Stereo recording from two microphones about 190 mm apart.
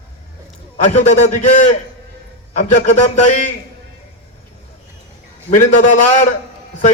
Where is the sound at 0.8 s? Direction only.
35° left (ahead or behind).